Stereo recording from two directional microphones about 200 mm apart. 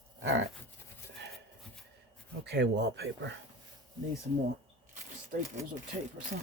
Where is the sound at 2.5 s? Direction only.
55° right (ahead or behind).